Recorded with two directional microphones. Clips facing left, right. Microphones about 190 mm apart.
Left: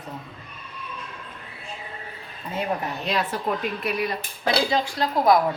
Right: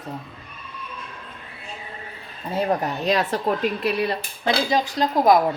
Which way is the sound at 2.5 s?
40° right (ahead or behind).